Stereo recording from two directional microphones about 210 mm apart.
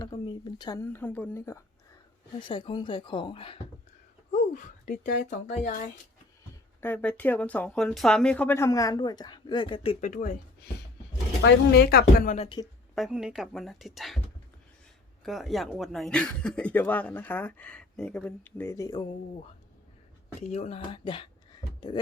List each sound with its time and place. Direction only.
0.0 s a woman's voice: 20° left (ahead or behind)
4.3 s speech: 35° left (ahead or behind)
6.8 s speech: 10° left (ahead or behind); by 10.3 s 35° left (ahead or behind)
11.4 s a woman's voice: 50° left (ahead or behind)
13.0 s speech: centre (ahead or behind)
15.2 s speech: centre (ahead or behind); by 19.0 s 15° left (ahead or behind)
20.4 s a woman's voice: 30° left (ahead or behind)